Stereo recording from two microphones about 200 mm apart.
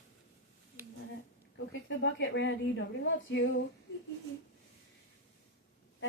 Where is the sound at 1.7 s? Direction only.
65° left (ahead or behind).